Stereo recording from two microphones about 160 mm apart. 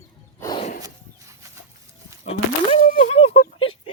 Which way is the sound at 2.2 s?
45° left (ahead or behind).